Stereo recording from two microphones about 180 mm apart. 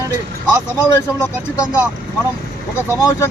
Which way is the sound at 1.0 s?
15° left (ahead or behind).